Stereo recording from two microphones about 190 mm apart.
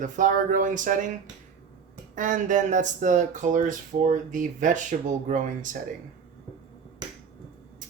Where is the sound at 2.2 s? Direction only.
40° right (ahead or behind).